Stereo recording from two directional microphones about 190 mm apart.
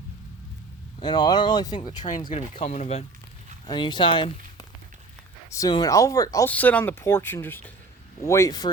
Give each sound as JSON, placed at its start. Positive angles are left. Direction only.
{"t": 0.9, "sound": "speech", "side_deg": 25}
{"t": 2.3, "sound": "speech", "side_deg": 35}
{"t": 3.7, "sound": "speech", "side_deg": 25}
{"t": 5.5, "sound": "speech", "side_deg": 20}